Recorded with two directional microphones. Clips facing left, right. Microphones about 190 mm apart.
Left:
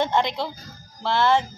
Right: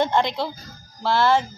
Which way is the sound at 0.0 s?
20° left (ahead or behind).